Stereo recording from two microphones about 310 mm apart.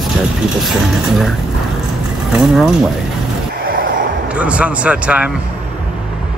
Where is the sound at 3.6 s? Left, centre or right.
Right.